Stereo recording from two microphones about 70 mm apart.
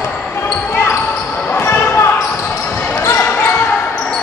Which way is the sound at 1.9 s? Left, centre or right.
Left.